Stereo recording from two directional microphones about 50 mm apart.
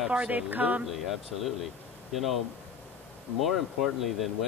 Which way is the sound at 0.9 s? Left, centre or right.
Centre.